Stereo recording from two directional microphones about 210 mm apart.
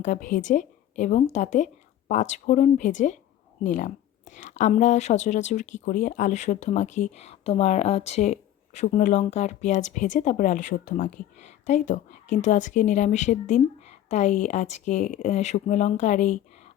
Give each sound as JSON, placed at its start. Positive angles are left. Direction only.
{"t": 0.0, "sound": "speech", "side_deg": 35}